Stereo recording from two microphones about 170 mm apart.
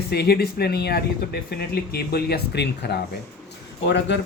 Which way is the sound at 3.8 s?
90° left.